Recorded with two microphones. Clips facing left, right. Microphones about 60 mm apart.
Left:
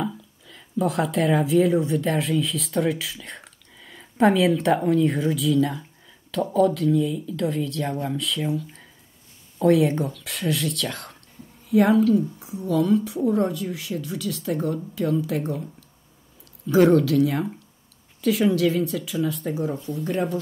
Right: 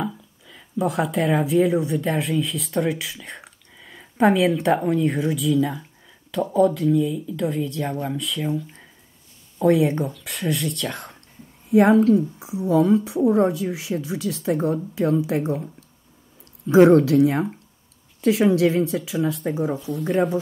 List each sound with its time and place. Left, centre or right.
0.0 s speech: centre
9.6 s speech: centre
11.9 s a woman's voice: right
12.4 s a woman's voice: centre
16.6 s speech: centre
17.1 s speech: right
18.4 s a woman's voice: right
19.5 s speech: centre
19.8 s speech: right
20.1 s speech: centre